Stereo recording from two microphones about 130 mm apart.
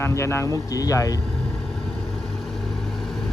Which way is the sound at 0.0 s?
20° left (ahead or behind).